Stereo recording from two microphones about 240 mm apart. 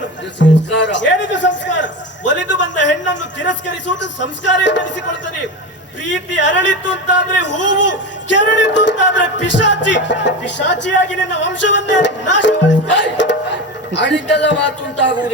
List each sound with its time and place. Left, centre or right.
0.3 s music: left
3.3 s speech: left
6.1 s speech: left
12.4 s music: left
14.0 s speech: left